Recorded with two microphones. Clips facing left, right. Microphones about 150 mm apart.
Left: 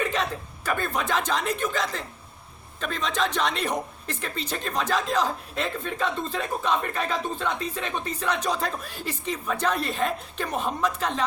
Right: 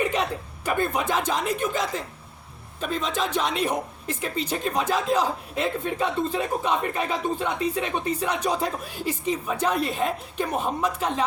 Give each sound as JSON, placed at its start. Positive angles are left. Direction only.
{"t": 0.0, "sound": "speech", "side_deg": -15}